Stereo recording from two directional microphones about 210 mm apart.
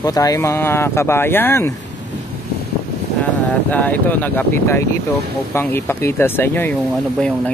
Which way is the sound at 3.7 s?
5° left (ahead or behind).